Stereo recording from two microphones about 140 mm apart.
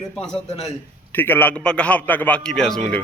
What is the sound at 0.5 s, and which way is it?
Speech, 45° left (ahead or behind).